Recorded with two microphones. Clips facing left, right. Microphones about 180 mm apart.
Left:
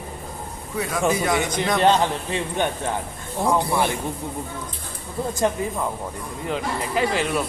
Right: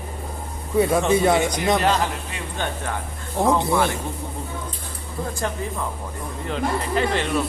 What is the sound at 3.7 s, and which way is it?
Speech, 20° left (ahead or behind).